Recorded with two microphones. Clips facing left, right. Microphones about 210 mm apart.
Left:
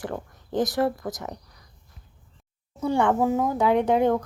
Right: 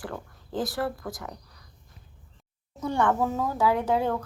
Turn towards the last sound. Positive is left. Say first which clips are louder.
# left 4 dB
turn(degrees=20)  # may be behind; listen again after turning